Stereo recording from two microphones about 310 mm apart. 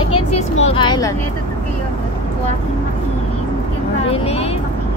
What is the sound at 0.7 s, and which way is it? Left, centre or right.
Speech, centre.